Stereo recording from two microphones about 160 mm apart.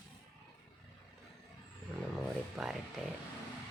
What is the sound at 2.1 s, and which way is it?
Speech, 5° right (ahead or behind).